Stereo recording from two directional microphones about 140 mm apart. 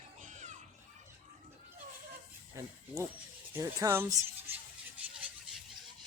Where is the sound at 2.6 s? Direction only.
20° right (ahead or behind).